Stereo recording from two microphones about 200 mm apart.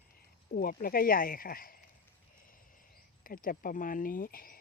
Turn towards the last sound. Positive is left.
turn(degrees=45)  # may be behind; listen again after turning